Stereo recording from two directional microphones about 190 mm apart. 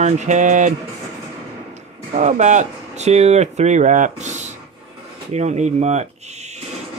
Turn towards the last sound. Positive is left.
turn(degrees=-35)  # may be behind; listen again after turning